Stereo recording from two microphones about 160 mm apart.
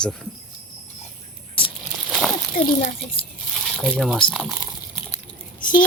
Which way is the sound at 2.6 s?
35° left (ahead or behind).